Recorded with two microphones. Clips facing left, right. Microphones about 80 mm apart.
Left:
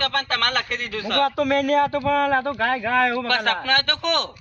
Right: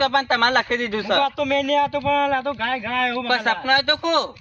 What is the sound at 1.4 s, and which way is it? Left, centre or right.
Speech, left.